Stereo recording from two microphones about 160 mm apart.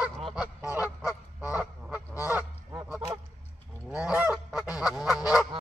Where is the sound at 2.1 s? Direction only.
20° left (ahead or behind).